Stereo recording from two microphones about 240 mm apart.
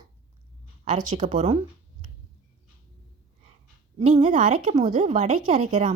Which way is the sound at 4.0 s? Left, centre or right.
Right.